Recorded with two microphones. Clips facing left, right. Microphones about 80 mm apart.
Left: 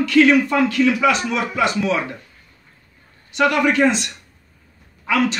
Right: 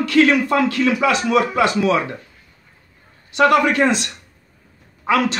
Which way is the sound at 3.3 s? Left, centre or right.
Right.